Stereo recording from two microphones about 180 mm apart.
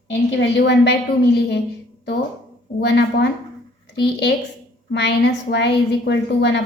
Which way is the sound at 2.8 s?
70° left (ahead or behind).